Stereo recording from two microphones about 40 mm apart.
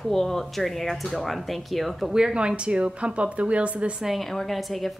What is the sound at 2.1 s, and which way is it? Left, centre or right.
A woman's voice, right.